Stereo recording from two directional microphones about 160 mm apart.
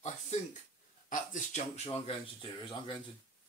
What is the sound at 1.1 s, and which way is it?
Speech, 50° left (ahead or behind).